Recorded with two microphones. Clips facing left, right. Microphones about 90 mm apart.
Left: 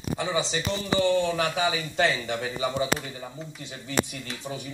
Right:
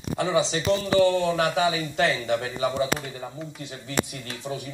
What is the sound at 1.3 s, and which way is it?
Speech, 50° right (ahead or behind).